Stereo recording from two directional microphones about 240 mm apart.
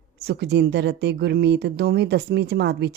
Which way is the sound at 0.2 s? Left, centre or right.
Right.